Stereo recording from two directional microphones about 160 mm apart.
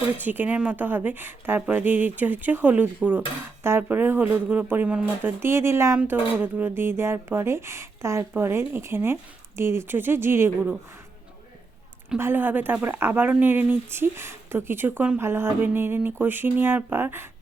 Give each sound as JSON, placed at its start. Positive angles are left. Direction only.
{"t": 0.2, "sound": "speech", "side_deg": -10}
{"t": 12.1, "sound": "speech", "side_deg": -15}